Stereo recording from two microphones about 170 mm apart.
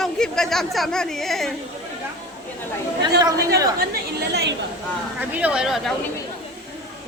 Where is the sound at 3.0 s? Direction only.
20° right (ahead or behind).